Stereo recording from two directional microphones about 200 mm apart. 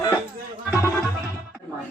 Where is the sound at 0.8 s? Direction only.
15° left (ahead or behind).